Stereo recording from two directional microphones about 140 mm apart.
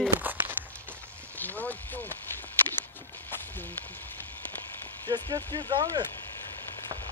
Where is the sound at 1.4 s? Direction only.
10° left (ahead or behind).